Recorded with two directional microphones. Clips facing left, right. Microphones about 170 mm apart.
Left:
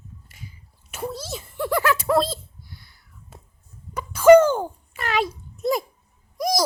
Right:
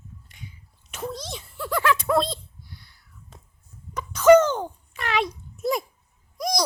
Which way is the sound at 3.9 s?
10° left (ahead or behind).